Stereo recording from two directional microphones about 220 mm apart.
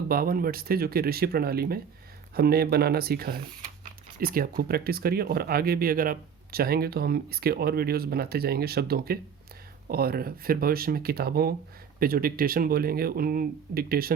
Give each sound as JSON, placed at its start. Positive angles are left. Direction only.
{"t": 0.1, "sound": "speech", "side_deg": -40}